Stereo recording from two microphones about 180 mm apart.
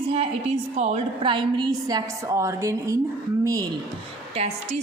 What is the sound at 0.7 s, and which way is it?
Speech, 40° right (ahead or behind).